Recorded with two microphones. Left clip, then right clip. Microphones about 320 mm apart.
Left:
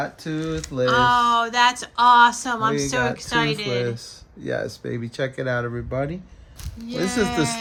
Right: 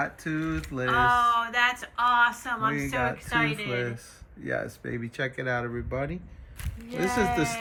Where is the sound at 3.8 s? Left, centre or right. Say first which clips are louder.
Left 7 dB; left.